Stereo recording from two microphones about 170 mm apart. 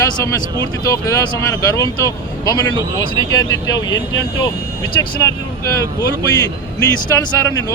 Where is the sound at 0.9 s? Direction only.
20° left (ahead or behind).